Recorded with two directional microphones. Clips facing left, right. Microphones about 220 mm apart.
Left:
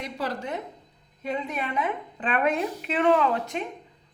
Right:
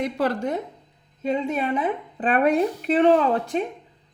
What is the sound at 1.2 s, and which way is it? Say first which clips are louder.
A woman's voice: right 6 dB; 25° right (ahead or behind).